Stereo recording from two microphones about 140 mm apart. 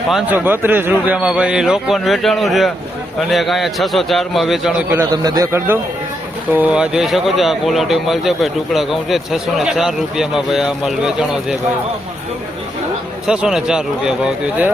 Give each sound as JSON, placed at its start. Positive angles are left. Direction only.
{"t": 0.1, "sound": "speech", "side_deg": -5}
{"t": 0.3, "sound": "a man's voice", "side_deg": -15}
{"t": 5.1, "sound": "a man's voice", "side_deg": -25}
{"t": 13.2, "sound": "speech", "side_deg": -5}